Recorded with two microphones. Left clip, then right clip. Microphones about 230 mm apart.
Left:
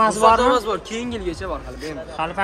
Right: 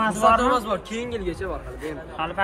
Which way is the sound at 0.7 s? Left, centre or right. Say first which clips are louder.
Left 1 dB; left.